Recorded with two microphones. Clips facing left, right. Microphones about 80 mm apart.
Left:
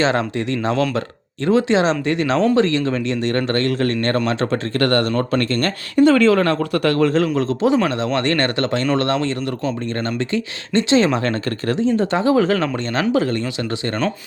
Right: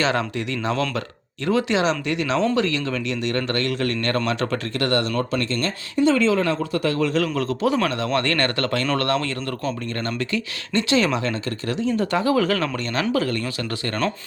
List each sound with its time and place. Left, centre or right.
0.0 s a man's voice: left
4.7 s speech: left
7.0 s a man's voice: left
7.3 s speech: left
11.2 s speech: left
11.8 s speech: left